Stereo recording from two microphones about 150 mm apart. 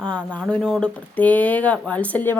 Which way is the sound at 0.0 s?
5° left (ahead or behind).